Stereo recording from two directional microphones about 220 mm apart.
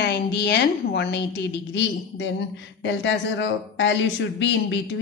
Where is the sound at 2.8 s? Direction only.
55° left (ahead or behind).